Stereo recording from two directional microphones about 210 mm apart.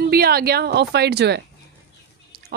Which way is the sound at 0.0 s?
45° right (ahead or behind).